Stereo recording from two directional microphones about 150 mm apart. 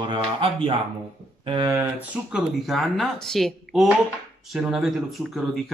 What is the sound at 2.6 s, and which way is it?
Speech, centre (ahead or behind).